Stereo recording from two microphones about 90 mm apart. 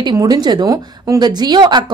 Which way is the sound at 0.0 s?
50° right (ahead or behind).